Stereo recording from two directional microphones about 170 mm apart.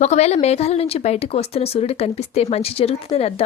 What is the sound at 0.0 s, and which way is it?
Speech, 40° left (ahead or behind).